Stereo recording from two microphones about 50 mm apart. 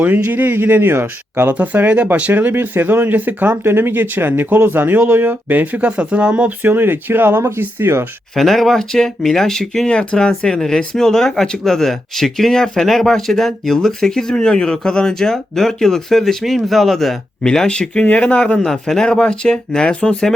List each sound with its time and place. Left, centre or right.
0.0 s speech: right
3.6 s speech: right
5.8 s speech: right
6.6 s speech: right
8.4 s speech: centre
17.4 s speech: centre
18.6 s speech: centre